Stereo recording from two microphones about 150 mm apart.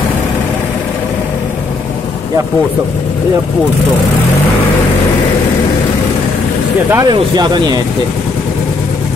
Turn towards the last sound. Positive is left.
turn(degrees=-30)  # may be behind; listen again after turning